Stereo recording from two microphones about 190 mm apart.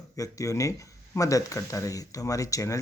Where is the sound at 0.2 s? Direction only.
15° left (ahead or behind).